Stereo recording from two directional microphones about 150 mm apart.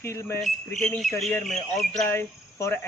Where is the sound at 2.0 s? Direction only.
15° left (ahead or behind).